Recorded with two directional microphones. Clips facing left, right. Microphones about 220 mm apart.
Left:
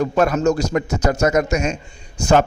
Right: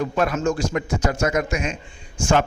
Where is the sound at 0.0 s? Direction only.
45° left (ahead or behind).